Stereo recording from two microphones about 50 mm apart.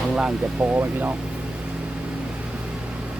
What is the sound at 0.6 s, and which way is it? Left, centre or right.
Speech, right.